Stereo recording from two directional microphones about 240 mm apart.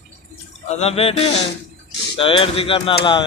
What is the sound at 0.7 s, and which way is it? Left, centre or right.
Speech, left.